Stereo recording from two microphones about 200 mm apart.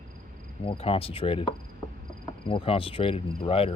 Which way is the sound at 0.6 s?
30° left (ahead or behind).